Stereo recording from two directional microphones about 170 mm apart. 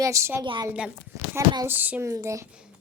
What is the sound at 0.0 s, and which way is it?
Speech, 15° right (ahead or behind).